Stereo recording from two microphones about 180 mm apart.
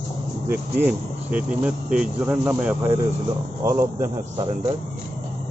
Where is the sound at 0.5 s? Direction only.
10° right (ahead or behind).